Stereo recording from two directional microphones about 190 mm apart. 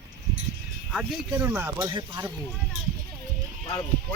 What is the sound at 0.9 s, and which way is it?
Speech, 10° right (ahead or behind).